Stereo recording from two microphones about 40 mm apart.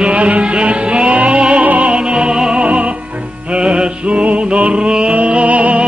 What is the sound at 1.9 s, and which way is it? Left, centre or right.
Music, right.